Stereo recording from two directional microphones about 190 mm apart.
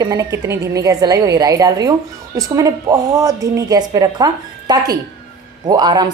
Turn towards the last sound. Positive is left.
turn(degrees=-20)  # may be behind; listen again after turning